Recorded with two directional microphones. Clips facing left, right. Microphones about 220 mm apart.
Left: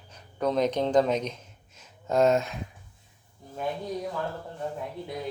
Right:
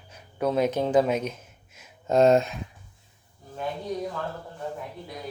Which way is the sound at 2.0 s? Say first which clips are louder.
Right 3 dB; 30° right (ahead or behind).